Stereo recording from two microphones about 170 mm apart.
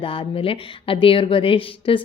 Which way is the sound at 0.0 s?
30° left (ahead or behind).